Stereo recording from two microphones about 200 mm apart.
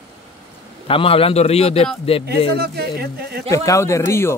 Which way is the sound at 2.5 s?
50° right (ahead or behind).